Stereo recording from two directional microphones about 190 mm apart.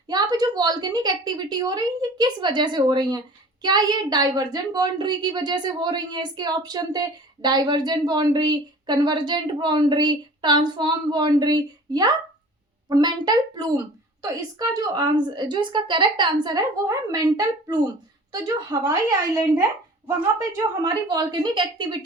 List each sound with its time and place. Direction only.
0.1 s a woman's voice: 20° right (ahead or behind)